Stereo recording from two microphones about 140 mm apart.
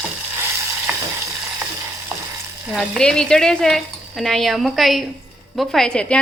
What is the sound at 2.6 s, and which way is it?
Frying, 10° right (ahead or behind).